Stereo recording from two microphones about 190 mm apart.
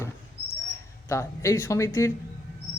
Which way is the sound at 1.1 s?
15° left (ahead or behind).